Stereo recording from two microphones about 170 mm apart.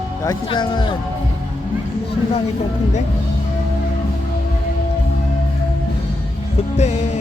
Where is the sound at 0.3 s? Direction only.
30° left (ahead or behind).